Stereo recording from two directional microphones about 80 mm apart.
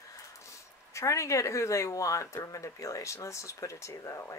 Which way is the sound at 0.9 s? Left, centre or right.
Left.